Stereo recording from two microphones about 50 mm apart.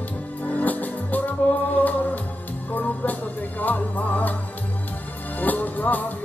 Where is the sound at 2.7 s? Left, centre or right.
Left.